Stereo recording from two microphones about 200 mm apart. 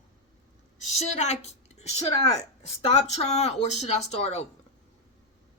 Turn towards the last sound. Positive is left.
turn(degrees=35)  # may be behind; listen again after turning